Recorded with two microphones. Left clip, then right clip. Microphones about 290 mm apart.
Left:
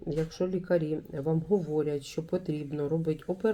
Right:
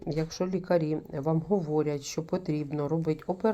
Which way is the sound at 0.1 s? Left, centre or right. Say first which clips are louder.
Even; centre.